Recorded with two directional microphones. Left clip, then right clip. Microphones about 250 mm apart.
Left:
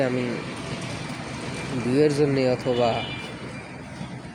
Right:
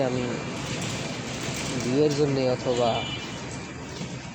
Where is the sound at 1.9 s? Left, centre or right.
Left.